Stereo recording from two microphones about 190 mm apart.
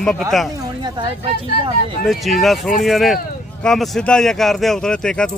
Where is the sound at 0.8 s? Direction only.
25° right (ahead or behind).